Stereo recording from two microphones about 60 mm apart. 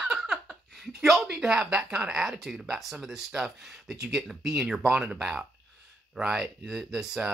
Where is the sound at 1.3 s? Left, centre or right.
Centre.